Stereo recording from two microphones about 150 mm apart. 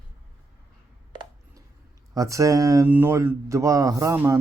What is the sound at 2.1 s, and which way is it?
Speech, 20° right (ahead or behind).